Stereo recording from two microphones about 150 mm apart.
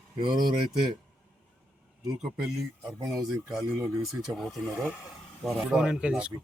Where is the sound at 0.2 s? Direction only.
30° right (ahead or behind).